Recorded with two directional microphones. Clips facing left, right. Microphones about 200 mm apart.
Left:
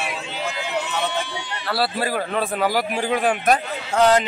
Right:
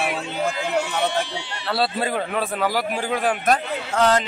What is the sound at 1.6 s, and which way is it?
Speech, 25° right (ahead or behind).